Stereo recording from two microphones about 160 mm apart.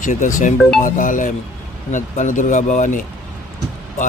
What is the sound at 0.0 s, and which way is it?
Speech, 55° left (ahead or behind).